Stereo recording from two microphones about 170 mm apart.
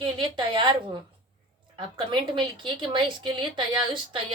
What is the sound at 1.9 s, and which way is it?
A woman's voice, 30° right (ahead or behind).